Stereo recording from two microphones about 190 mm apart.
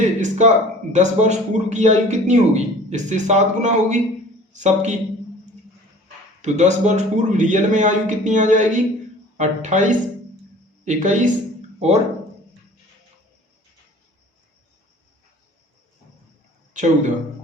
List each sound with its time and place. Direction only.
0.0 s a sound: 40° right (ahead or behind)
0.9 s a man's voice: 35° right (ahead or behind)
6.4 s a man's voice: 35° right (ahead or behind)
16.7 s a man's voice: 40° right (ahead or behind)